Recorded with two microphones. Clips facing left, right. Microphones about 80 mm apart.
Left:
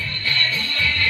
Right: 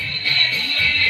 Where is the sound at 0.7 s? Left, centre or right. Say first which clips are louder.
Right 1 dB; left.